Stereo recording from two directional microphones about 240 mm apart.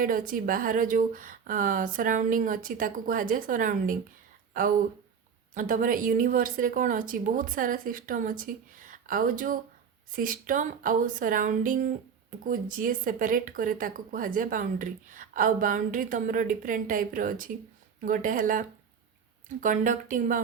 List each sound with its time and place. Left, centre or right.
0.0 s a woman's voice: right
5.5 s a woman's voice: right
19.6 s a woman's voice: right